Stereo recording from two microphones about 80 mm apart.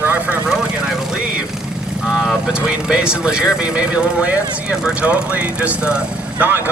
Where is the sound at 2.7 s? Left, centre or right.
Centre.